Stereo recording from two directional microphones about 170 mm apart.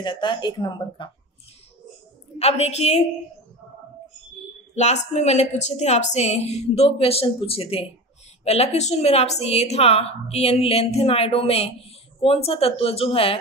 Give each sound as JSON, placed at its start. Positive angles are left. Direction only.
{"t": 0.0, "sound": "speech", "side_deg": 25}
{"t": 2.3, "sound": "a woman's voice", "side_deg": 40}
{"t": 4.7, "sound": "a woman's voice", "side_deg": 40}